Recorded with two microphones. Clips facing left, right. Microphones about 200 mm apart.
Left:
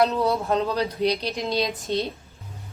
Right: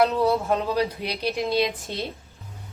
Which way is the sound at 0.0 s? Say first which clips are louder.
Right 1 dB; 10° right (ahead or behind).